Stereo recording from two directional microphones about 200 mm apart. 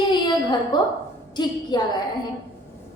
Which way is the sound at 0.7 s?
20° left (ahead or behind).